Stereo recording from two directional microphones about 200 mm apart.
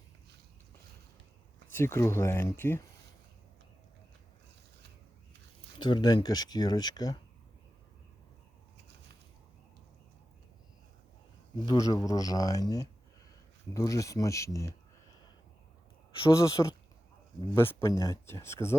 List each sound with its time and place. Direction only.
1.7 s speech: 15° left (ahead or behind)
5.8 s speech: 20° left (ahead or behind)
11.6 s speech: 20° left (ahead or behind)
16.1 s speech: 20° left (ahead or behind)